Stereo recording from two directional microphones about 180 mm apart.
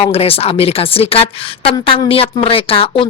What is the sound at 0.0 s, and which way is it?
A woman's voice, 35° left (ahead or behind).